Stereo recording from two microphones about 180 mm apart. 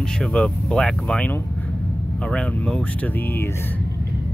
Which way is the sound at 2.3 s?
5° left (ahead or behind).